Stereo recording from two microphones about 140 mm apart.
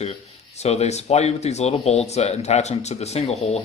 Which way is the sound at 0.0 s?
50° left (ahead or behind).